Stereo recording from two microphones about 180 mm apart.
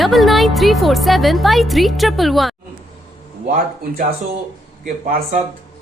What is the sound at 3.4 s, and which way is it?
Speech, 50° right (ahead or behind).